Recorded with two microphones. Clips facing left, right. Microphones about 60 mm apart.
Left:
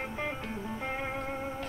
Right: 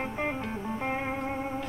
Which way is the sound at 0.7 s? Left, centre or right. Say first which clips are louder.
Right 4 dB; right.